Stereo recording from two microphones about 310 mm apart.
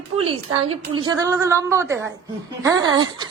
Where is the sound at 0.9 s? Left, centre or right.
Centre.